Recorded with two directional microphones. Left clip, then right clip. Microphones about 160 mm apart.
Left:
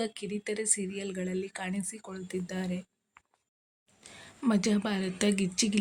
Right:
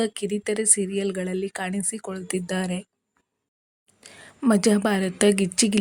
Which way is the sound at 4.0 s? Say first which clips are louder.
Right 8 dB; 35° right (ahead or behind).